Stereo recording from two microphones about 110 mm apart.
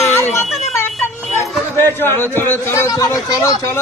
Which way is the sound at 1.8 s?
20° left (ahead or behind).